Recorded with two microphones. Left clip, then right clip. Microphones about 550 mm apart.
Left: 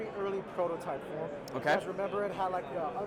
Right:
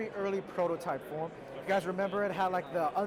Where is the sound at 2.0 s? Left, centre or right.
Right.